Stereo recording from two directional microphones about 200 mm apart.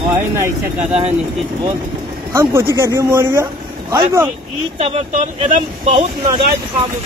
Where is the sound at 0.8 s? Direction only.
30° right (ahead or behind).